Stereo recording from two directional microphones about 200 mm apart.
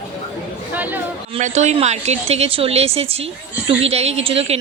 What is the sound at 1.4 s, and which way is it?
A woman's voice, 35° right (ahead or behind).